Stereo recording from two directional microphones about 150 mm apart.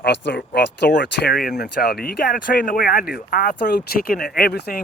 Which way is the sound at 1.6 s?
90° left.